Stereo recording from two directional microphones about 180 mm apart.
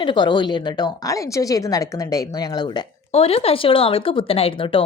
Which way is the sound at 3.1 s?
35° left (ahead or behind).